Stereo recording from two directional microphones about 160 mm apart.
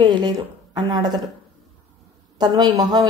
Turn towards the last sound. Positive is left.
turn(degrees=-25)  # may be behind; listen again after turning